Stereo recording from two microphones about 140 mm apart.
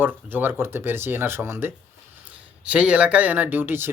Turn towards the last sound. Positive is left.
turn(degrees=-15)  # may be behind; listen again after turning